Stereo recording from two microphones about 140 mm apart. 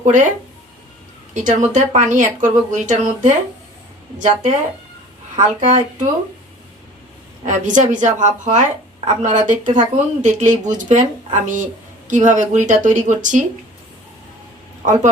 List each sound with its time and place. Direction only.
0.0 s speech: 60° right (ahead or behind)
1.3 s speech: 60° right (ahead or behind)
5.5 s speech: 60° right (ahead or behind)
7.4 s speech: 60° right (ahead or behind)
14.8 s speech: 60° right (ahead or behind)